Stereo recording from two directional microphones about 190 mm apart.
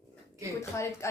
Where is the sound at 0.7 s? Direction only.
15° left (ahead or behind).